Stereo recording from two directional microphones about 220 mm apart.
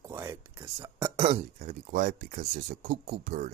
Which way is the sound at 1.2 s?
30° right (ahead or behind).